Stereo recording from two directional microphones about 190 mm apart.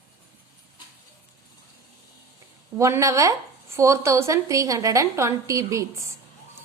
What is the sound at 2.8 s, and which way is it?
A woman's voice, 15° right (ahead or behind).